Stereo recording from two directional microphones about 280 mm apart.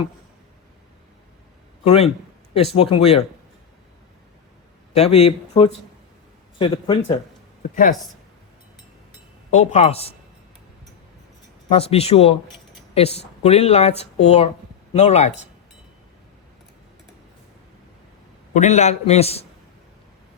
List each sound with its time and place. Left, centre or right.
1.8 s speech: left
4.9 s speech: left
9.5 s speech: left
11.7 s speech: left
18.5 s speech: left